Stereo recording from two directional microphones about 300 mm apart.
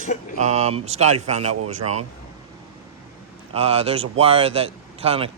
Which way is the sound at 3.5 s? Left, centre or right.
Centre.